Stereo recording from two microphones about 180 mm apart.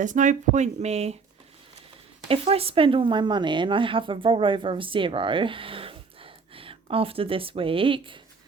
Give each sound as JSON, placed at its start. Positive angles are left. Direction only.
{"t": 0.0, "sound": "speech", "side_deg": -45}
{"t": 2.2, "sound": "speech", "side_deg": -35}